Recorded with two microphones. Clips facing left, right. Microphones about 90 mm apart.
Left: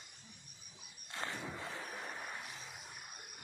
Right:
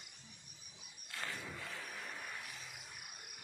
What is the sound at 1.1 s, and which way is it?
Wild animals, 25° left (ahead or behind).